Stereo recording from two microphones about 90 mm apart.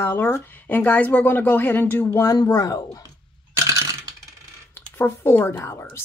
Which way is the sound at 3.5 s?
40° right (ahead or behind).